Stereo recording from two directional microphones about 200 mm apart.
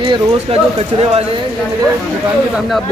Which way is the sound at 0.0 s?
25° right (ahead or behind).